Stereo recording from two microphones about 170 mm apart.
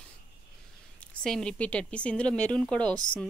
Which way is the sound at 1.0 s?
5° left (ahead or behind).